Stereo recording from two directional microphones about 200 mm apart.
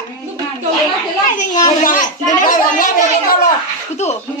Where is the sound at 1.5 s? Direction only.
40° left (ahead or behind).